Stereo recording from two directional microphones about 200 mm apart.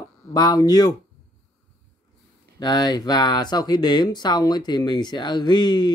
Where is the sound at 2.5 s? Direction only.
20° left (ahead or behind).